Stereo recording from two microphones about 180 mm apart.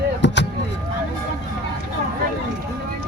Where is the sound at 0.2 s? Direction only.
80° left.